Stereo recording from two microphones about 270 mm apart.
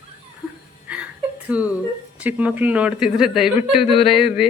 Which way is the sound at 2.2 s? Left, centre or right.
Centre.